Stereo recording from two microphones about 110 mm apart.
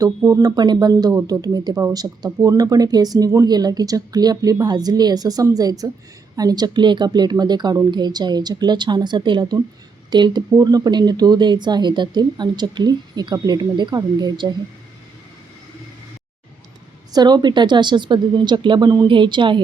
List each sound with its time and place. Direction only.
0.2 s a woman's voice: 30° right (ahead or behind)
17.1 s a woman's voice: 40° right (ahead or behind)